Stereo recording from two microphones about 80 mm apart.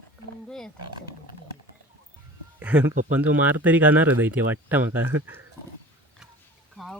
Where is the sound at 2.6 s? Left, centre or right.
Right.